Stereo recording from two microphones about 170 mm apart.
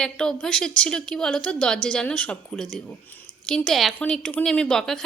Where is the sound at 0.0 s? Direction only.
5° left (ahead or behind).